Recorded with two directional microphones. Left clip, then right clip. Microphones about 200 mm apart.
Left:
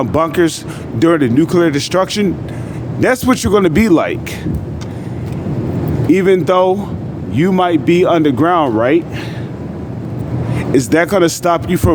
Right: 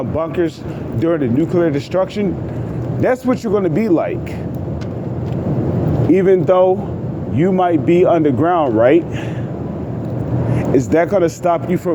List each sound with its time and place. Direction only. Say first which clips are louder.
0.0 s speech: left 5 dB; 45° left (ahead or behind)
6.1 s speech: left 1 dB; 30° left (ahead or behind)
10.5 s speech: left 2 dB; 25° left (ahead or behind)